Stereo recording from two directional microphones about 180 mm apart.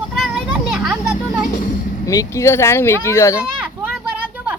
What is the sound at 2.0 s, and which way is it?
Speech, 20° left (ahead or behind).